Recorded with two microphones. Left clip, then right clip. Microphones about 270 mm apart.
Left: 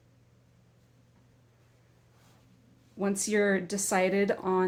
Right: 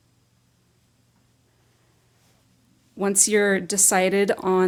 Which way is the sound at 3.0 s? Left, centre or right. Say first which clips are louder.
Right 7 dB; right.